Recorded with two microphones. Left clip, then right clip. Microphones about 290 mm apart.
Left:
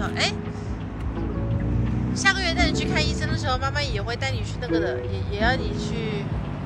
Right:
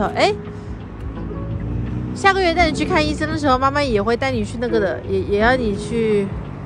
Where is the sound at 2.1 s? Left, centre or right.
Centre.